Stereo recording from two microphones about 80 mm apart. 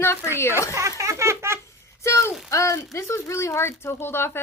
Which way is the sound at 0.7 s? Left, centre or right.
Right.